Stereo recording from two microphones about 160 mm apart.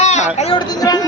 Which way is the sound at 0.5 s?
25° left (ahead or behind).